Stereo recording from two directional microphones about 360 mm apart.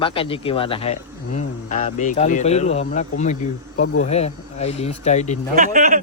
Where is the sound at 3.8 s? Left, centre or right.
Left.